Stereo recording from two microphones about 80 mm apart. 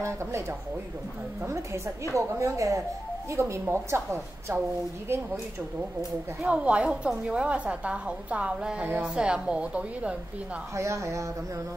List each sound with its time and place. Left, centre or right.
0.0 s a woman's voice: right
6.4 s a woman's voice: centre
10.8 s a woman's voice: right